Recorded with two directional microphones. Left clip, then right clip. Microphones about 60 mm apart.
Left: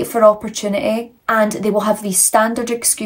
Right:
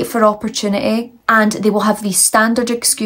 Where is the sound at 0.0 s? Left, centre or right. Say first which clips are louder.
Left 2 dB; right.